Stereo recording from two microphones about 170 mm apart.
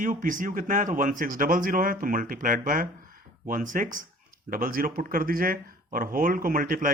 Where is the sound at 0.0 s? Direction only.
50° right (ahead or behind).